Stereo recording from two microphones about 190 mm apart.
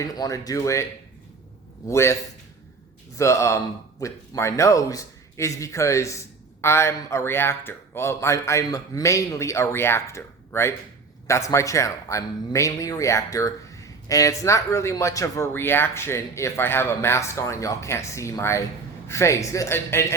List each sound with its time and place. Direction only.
0.0 s speech: 20° left (ahead or behind)
1.9 s speech: 15° left (ahead or behind)
3.2 s speech: 15° left (ahead or behind)